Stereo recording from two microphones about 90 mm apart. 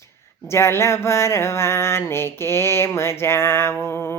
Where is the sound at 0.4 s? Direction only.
30° left (ahead or behind).